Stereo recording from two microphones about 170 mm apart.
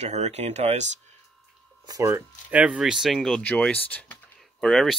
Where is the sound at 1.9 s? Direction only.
20° right (ahead or behind).